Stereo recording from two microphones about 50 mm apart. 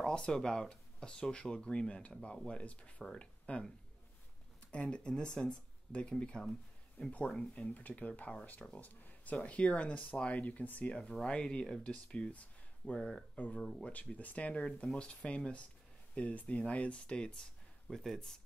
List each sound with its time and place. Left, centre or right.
0.1 s speech: centre
4.6 s speech: centre
13.6 s speech: centre
14.0 s speech: left
17.8 s speech: centre